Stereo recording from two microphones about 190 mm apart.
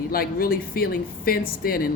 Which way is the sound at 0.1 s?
50° left (ahead or behind).